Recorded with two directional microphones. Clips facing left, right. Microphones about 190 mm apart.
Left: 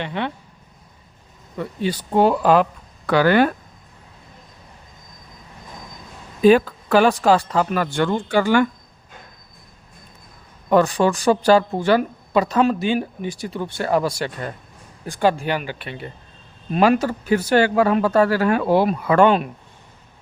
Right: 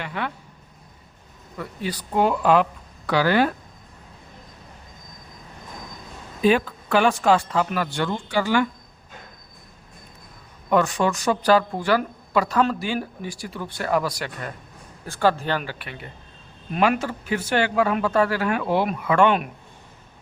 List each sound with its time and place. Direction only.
0.0 s speech: 25° left (ahead or behind)
1.5 s speech: 25° left (ahead or behind)
3.1 s speech: 55° left (ahead or behind)
6.4 s speech: 40° left (ahead or behind)
10.7 s speech: 35° left (ahead or behind)
15.0 s speech: 15° left (ahead or behind); by 19.5 s 35° left (ahead or behind)